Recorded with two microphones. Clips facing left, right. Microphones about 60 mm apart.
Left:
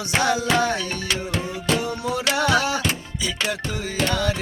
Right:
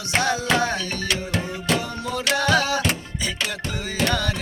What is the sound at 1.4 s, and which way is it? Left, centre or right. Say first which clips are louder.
Music: left 2 dB; centre.